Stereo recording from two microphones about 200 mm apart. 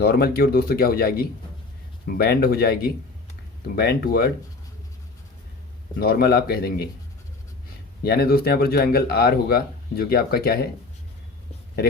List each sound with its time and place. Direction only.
0.0 s speech: 50° left (ahead or behind)
6.0 s speech: 50° left (ahead or behind)
8.0 s speech: 50° left (ahead or behind)